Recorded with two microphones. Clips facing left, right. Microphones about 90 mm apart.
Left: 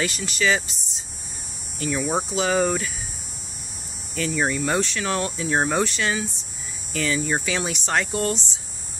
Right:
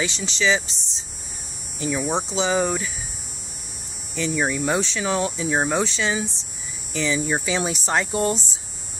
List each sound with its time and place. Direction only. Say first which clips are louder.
0.0 s speech: even; centre (ahead or behind)
1.8 s speech: right 1 dB; 10° right (ahead or behind)
2.0 s speech: even; 5° left (ahead or behind)
4.1 s speech: even; 5° right (ahead or behind)
7.4 s speech: right 2 dB; 15° right (ahead or behind)
8.1 s speech: right 2 dB; 20° right (ahead or behind)